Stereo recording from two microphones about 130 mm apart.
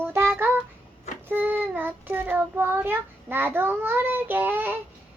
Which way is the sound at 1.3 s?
15° right (ahead or behind).